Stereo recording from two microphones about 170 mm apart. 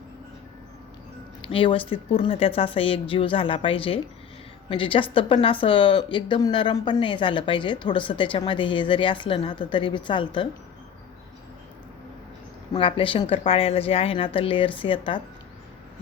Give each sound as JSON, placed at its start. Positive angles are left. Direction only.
{"t": 1.4, "sound": "a woman's voice", "side_deg": 30}
{"t": 12.7, "sound": "speech", "side_deg": 30}